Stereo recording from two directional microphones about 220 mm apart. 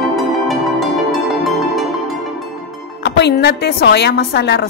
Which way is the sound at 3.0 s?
50° left (ahead or behind).